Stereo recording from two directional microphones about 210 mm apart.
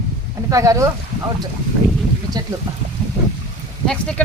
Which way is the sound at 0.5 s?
15° right (ahead or behind).